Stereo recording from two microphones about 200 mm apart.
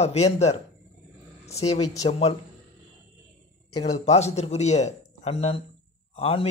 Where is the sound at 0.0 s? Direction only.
30° left (ahead or behind).